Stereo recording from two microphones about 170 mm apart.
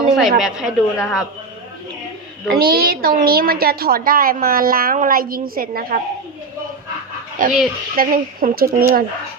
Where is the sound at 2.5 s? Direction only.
60° right (ahead or behind).